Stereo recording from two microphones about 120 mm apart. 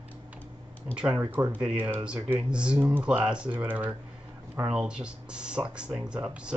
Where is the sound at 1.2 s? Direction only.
20° right (ahead or behind).